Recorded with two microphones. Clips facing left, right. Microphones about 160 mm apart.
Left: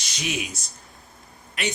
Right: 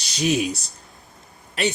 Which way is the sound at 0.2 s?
35° right (ahead or behind).